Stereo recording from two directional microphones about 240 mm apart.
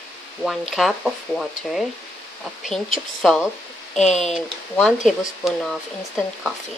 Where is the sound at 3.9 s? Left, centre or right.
Left.